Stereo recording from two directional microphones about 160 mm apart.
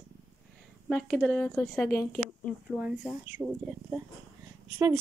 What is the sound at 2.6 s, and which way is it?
Speech, 10° right (ahead or behind).